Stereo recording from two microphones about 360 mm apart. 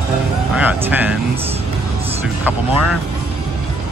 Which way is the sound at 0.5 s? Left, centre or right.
Centre.